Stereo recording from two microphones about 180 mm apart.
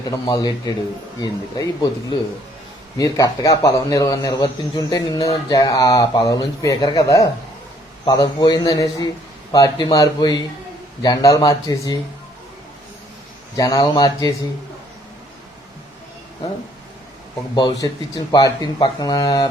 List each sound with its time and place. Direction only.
0.0 s a man's voice: 20° left (ahead or behind)
13.6 s a man's voice: 20° left (ahead or behind)
17.5 s a man's voice: 25° left (ahead or behind)